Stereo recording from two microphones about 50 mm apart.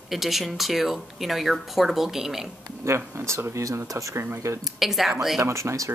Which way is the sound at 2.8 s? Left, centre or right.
Right.